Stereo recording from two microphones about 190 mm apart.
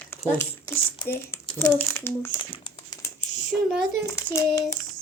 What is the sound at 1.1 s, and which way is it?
Crumpling, 10° left (ahead or behind).